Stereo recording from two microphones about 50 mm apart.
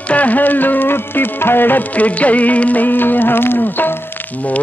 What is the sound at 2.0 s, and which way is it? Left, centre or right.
Music, left.